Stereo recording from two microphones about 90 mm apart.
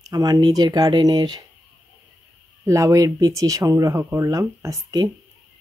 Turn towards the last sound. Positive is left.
turn(degrees=-40)  # may be behind; listen again after turning